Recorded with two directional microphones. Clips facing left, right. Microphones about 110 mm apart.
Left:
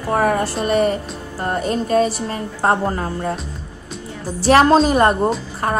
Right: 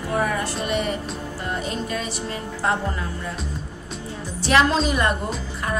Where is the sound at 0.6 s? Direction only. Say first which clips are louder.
Left 9 dB; 40° left (ahead or behind).